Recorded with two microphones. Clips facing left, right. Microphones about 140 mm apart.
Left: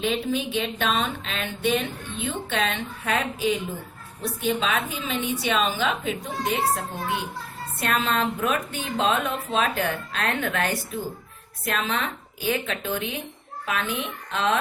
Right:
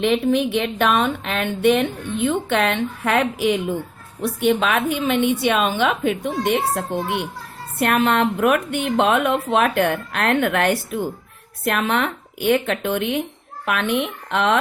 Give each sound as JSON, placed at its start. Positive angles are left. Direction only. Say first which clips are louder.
{"t": 0.0, "sound": "speech", "louder": "right 7 dB", "side_deg": -65}